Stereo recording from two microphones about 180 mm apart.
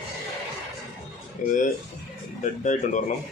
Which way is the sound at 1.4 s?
45° left (ahead or behind).